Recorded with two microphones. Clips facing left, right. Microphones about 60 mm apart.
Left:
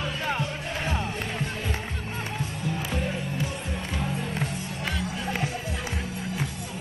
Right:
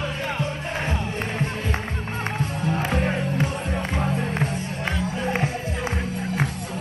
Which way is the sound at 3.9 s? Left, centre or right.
Right.